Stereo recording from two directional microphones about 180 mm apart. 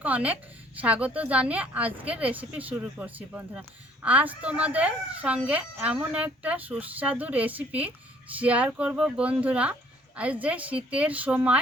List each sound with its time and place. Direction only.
0.0 s a woman's voice: 10° right (ahead or behind)